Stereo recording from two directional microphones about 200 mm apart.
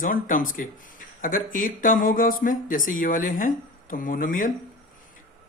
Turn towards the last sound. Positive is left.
turn(degrees=40)  # may be behind; listen again after turning